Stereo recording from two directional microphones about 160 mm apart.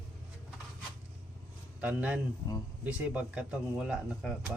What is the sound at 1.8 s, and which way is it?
Speech, 10° right (ahead or behind).